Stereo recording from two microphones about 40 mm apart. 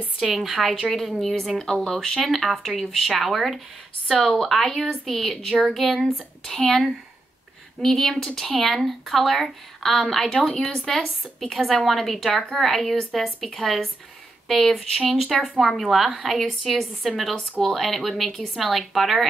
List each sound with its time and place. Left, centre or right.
0.2 s a woman's voice: centre
12.3 s speech: centre
12.5 s a woman's voice: centre